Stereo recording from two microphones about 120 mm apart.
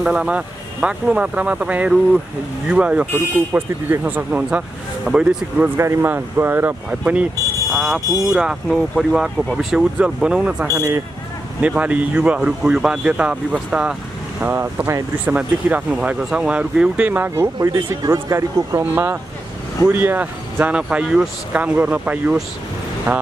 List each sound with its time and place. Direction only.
0.0 s speech: 5° right (ahead or behind)
5.8 s speech: 20° right (ahead or behind)
7.7 s a sound: 5° right (ahead or behind)
8.3 s speech: 5° right (ahead or behind)
10.7 s speech: 25° right (ahead or behind)
11.6 s speech: 10° right (ahead or behind)